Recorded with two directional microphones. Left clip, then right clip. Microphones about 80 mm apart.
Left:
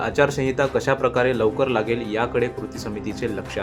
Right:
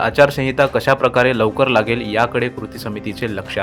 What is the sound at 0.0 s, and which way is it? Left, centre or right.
A man's voice, right.